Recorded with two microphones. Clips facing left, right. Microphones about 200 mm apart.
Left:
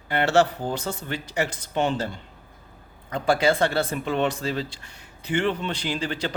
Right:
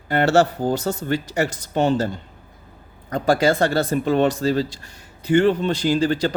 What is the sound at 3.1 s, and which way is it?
Speech, 40° right (ahead or behind).